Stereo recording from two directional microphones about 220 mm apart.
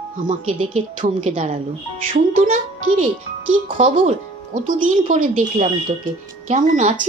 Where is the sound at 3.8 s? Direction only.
35° right (ahead or behind).